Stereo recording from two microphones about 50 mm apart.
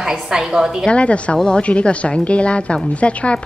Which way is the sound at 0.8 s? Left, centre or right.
Left.